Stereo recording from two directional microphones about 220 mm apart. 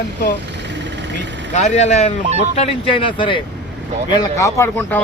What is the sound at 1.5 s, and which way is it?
A man's voice, 30° left (ahead or behind).